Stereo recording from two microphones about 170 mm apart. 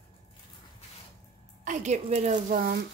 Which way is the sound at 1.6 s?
45° right (ahead or behind).